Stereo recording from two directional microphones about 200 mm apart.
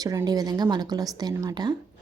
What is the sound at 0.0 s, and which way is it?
Speech, 20° right (ahead or behind).